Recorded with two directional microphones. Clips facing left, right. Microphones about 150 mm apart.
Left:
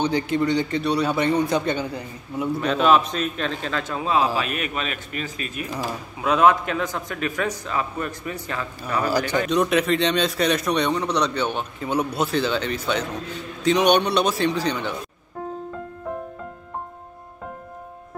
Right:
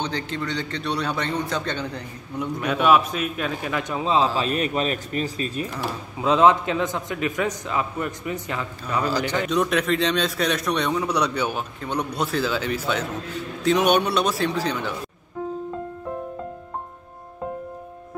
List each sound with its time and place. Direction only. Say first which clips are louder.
0.0 s a man's voice: left 7 dB; 10° left (ahead or behind)
2.6 s a man's voice: even; 10° right (ahead or behind)
4.4 s a man's voice: right 3 dB; 35° right (ahead or behind); by 8.6 s 20° right (ahead or behind)
9.5 s a man's voice: left 2 dB; centre (ahead or behind)
11.8 s a man's voice: left 3 dB; 5° left (ahead or behind)